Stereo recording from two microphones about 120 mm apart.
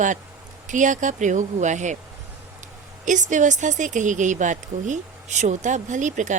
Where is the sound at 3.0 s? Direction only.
90° right.